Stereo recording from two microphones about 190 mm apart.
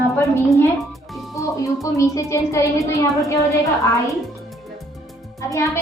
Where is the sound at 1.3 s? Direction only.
15° left (ahead or behind).